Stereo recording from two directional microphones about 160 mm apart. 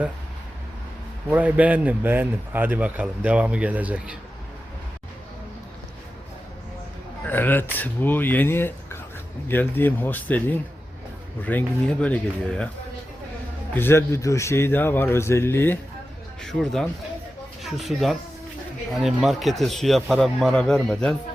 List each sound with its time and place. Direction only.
1.3 s a man's voice: 10° right (ahead or behind)
7.3 s a man's voice: 10° left (ahead or behind)
11.4 s a man's voice: 10° left (ahead or behind)
13.7 s a man's voice: 15° left (ahead or behind)
16.4 s speech: centre (ahead or behind)